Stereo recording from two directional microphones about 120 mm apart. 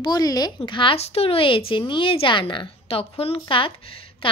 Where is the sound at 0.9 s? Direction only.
55° left (ahead or behind).